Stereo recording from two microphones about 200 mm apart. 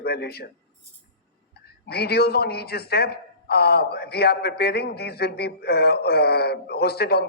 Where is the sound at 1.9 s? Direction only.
50° left (ahead or behind).